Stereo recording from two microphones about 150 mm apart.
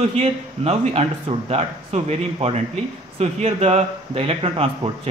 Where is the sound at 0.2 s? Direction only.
40° right (ahead or behind).